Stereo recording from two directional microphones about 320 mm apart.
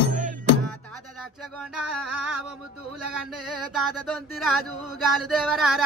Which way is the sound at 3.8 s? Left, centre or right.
Centre.